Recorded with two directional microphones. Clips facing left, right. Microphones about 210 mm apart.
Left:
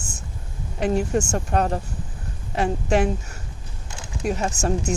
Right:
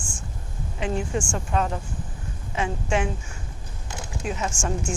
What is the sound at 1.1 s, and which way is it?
A woman's voice, 40° left (ahead or behind).